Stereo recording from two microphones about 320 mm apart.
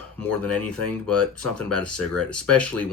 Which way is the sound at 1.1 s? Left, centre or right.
Right.